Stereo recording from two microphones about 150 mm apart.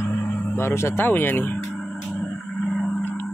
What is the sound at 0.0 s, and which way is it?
Speech, 10° left (ahead or behind).